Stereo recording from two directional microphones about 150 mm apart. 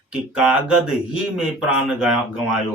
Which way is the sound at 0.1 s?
5° right (ahead or behind).